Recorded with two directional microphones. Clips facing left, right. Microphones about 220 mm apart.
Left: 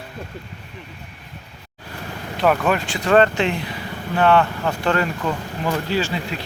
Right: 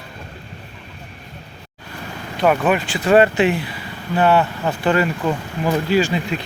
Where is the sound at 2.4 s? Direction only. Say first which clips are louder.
Right 2 dB; centre (ahead or behind).